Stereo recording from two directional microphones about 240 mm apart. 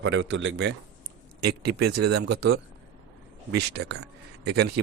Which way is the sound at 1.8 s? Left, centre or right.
Right.